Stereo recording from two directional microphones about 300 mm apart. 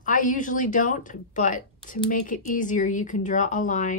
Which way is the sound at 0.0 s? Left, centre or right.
Left.